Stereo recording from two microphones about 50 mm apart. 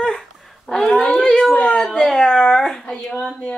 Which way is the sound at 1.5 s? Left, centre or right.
Left.